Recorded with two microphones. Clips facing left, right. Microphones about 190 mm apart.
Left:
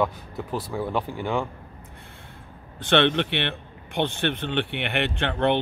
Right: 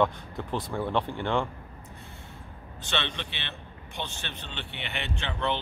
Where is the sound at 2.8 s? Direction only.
60° left (ahead or behind).